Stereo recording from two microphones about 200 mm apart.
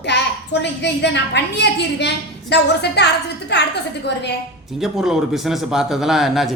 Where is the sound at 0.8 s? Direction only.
60° left (ahead or behind).